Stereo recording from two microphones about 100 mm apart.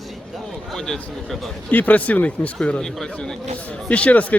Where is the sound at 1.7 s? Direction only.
15° left (ahead or behind).